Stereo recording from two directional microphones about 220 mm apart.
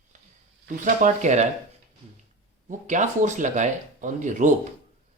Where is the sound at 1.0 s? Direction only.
35° right (ahead or behind).